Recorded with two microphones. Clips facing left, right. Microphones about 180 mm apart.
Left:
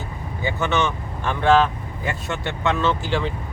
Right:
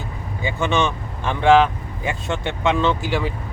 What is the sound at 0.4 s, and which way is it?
Speech, 15° right (ahead or behind).